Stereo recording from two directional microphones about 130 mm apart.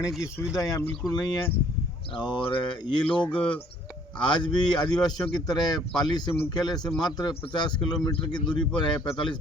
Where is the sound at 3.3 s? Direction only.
10° left (ahead or behind).